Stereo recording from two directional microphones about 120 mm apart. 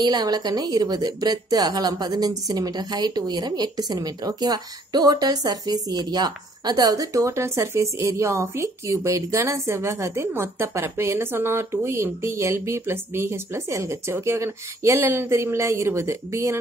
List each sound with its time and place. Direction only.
0.0 s a woman's voice: 35° right (ahead or behind)